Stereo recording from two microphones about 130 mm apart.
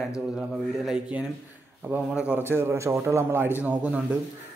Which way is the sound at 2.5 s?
20° right (ahead or behind).